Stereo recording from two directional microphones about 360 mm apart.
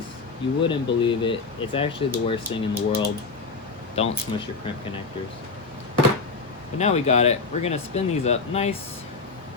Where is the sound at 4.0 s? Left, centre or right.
Centre.